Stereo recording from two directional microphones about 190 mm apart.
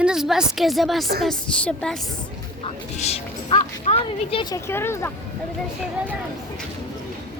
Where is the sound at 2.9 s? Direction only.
35° left (ahead or behind).